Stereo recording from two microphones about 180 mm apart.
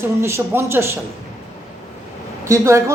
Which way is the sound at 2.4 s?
15° right (ahead or behind).